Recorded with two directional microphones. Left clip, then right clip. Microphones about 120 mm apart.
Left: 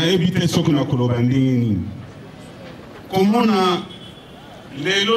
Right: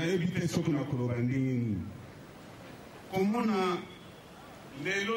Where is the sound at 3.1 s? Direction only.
15° left (ahead or behind).